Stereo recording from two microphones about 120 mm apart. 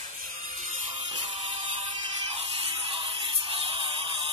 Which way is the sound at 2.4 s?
50° right (ahead or behind).